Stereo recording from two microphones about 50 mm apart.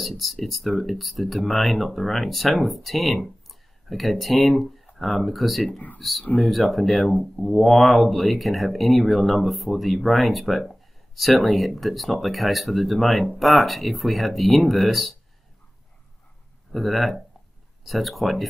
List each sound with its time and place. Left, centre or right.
0.2 s speech: centre
3.4 s a sound: centre
4.9 s speech: centre
5.7 s speech: left
5.9 s speech: centre
16.7 s speech: centre